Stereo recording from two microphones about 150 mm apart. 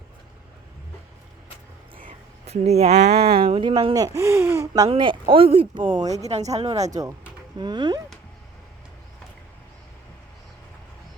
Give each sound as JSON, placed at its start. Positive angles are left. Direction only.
{"t": 2.5, "sound": "speech", "side_deg": -45}
{"t": 3.9, "sound": "speech", "side_deg": -20}
{"t": 4.9, "sound": "speech", "side_deg": -35}
{"t": 6.0, "sound": "speech", "side_deg": -25}
{"t": 6.2, "sound": "speech", "side_deg": -45}
{"t": 7.6, "sound": "speech", "side_deg": -30}